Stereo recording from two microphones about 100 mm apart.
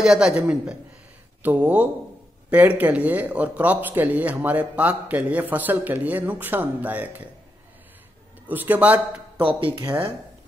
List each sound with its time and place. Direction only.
0.0 s a woman's voice: 5° right (ahead or behind)
8.5 s speech: 15° right (ahead or behind)
9.4 s speech: 65° right (ahead or behind)